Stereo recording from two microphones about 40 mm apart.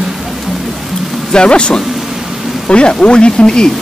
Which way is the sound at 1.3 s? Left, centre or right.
Left.